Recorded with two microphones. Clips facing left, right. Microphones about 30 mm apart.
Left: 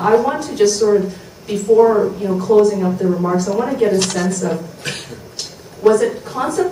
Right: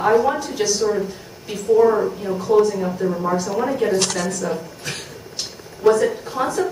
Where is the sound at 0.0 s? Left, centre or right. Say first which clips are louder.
Left 2 dB; centre.